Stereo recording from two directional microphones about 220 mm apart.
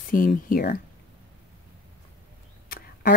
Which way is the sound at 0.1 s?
40° left (ahead or behind).